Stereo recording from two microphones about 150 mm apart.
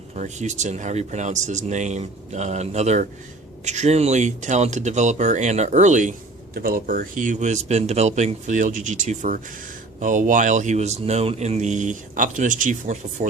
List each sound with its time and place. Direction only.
0.1 s a man's voice: 50° right (ahead or behind)